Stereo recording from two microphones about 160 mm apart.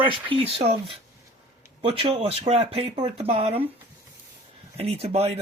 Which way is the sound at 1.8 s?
35° right (ahead or behind).